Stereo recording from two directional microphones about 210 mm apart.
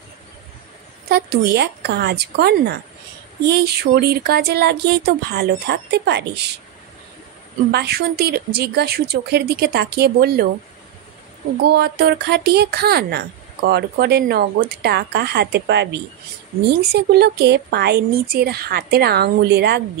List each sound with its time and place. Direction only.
1.0 s speech: 50° right (ahead or behind)
7.7 s speech: 50° right (ahead or behind)
11.6 s speech: 50° right (ahead or behind)